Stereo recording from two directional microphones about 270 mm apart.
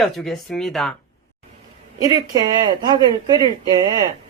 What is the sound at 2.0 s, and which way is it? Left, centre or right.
Speech, centre.